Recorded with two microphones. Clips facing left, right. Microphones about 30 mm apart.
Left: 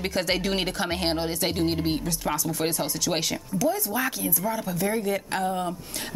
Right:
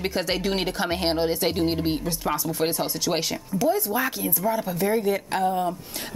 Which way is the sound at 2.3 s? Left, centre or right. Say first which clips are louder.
Right 2 dB; right.